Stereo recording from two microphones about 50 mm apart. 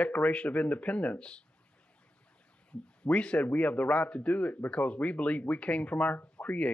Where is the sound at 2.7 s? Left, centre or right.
Left.